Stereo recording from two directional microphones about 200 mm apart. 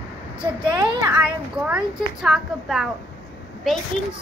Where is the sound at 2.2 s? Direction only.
Centre (ahead or behind).